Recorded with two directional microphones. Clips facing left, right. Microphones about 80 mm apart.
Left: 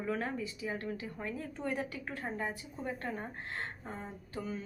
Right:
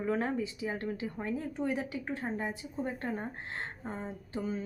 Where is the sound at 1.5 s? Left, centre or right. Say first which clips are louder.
Right 3 dB; centre.